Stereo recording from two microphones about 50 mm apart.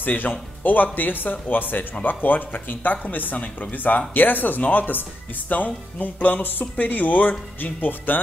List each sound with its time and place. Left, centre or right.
0.0 s speech: left